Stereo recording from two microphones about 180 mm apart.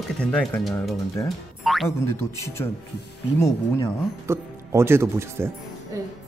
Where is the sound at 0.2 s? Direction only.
5° left (ahead or behind).